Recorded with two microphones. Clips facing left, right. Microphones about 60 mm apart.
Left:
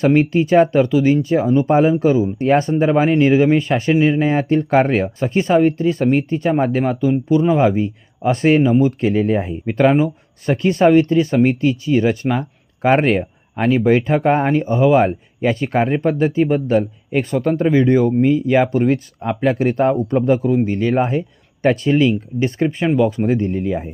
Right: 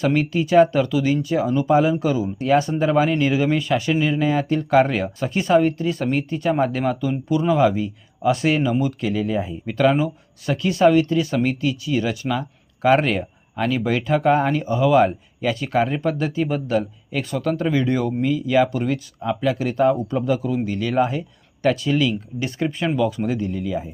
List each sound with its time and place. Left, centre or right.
0.0 s speech: left
9.6 s speech: left